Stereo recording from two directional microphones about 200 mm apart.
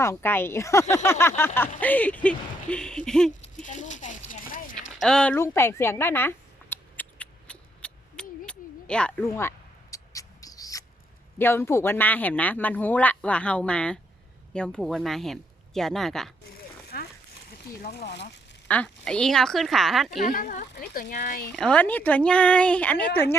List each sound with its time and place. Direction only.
0.0 s speech: 10° left (ahead or behind)
3.4 s a sound: 35° left (ahead or behind)
4.9 s a sound: 5° left (ahead or behind)
11.3 s speech: 10° left (ahead or behind)
17.7 s speech: 50° left (ahead or behind)
18.7 s speech: 5° left (ahead or behind)
20.2 s speech: 40° left (ahead or behind)
21.5 s speech: 5° left (ahead or behind)